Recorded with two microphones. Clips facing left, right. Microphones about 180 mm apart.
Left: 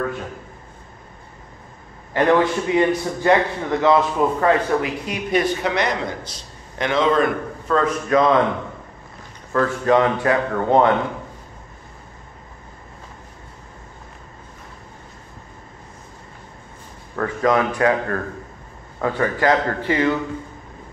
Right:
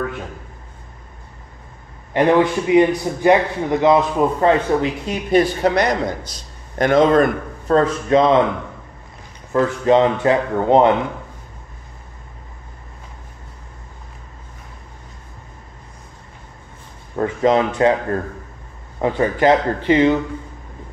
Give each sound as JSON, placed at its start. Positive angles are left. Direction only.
{"t": 2.1, "sound": "a man's voice", "side_deg": -20}
{"t": 9.5, "sound": "a man's voice", "side_deg": -20}
{"t": 17.1, "sound": "a man's voice", "side_deg": -25}